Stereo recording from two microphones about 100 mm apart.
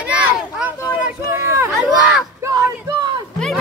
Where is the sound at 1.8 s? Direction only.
5° right (ahead or behind).